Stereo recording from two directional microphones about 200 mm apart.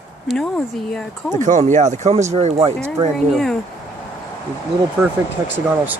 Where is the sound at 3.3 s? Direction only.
Centre (ahead or behind).